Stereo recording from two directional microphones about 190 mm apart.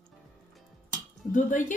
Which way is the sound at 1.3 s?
45° left (ahead or behind).